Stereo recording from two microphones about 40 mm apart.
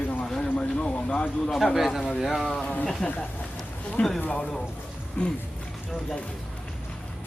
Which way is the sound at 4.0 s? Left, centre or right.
Left.